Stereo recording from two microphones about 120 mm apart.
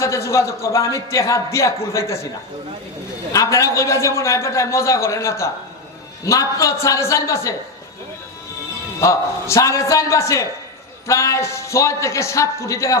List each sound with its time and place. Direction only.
0.0 s a man's voice: 25° left (ahead or behind)
3.3 s a man's voice: 25° left (ahead or behind)
9.0 s a man's voice: 25° left (ahead or behind)